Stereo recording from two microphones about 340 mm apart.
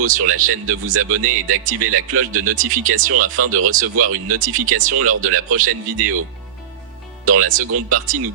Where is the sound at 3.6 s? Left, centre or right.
Right.